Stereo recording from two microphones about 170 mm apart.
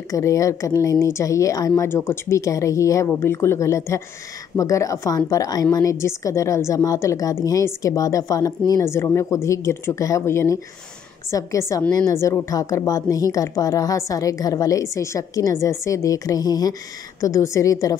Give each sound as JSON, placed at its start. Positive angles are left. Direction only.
{"t": 0.1, "sound": "a woman's voice", "side_deg": 20}